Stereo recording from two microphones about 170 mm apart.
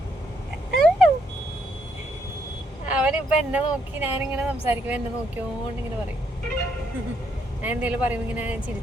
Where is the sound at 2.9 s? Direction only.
5° right (ahead or behind).